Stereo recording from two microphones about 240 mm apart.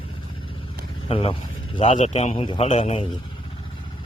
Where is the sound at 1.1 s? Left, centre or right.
Left.